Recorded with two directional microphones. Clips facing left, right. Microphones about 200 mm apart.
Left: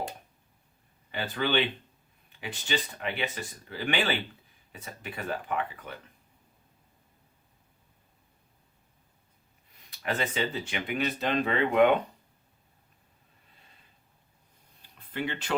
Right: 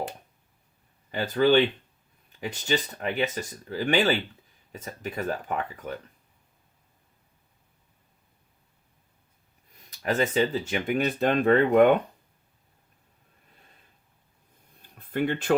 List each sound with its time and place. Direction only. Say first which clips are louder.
1.1 s speech: right 8 dB; 40° right (ahead or behind)
9.9 s speech: right 6 dB; 40° right (ahead or behind)
14.8 s a sound: right 7 dB; 50° right (ahead or behind)